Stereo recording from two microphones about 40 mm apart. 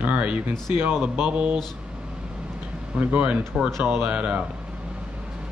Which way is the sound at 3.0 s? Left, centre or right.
Right.